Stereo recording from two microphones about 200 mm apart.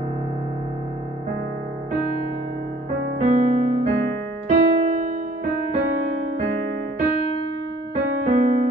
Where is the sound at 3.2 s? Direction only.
35° right (ahead or behind).